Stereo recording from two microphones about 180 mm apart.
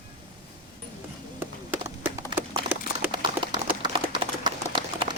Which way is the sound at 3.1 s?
30° right (ahead or behind).